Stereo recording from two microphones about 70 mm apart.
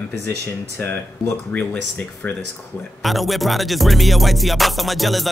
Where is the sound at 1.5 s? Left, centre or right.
Centre.